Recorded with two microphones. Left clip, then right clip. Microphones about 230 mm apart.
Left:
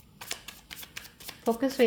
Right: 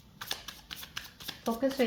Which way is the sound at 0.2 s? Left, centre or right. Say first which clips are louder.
Right 1 dB; centre.